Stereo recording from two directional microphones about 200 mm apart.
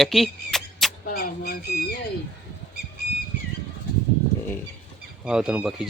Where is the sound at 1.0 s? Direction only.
50° left (ahead or behind).